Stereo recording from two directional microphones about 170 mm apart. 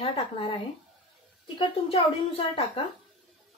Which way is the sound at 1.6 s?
35° left (ahead or behind).